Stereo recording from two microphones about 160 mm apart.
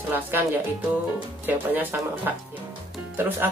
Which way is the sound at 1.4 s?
10° right (ahead or behind).